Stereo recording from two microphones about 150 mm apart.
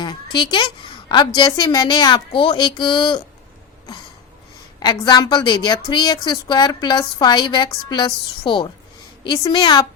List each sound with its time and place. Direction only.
0.0 s a woman's voice: 30° left (ahead or behind)
4.8 s a woman's voice: 25° left (ahead or behind)